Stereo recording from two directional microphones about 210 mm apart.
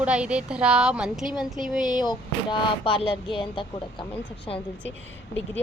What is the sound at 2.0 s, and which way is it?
Speech, 20° left (ahead or behind).